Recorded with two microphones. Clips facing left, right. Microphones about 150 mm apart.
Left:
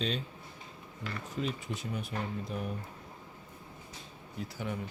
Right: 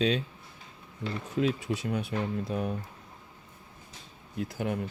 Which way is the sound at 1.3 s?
75° right (ahead or behind).